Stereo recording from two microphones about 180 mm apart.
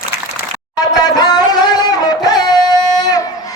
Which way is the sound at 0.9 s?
20° left (ahead or behind).